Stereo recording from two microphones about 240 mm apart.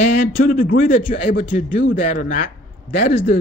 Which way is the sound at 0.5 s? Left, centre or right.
Left.